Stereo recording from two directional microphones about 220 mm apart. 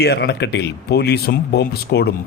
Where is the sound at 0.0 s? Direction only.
45° left (ahead or behind).